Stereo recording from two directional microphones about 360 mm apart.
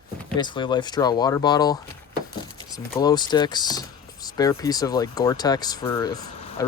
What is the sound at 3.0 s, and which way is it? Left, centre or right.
Speech, centre.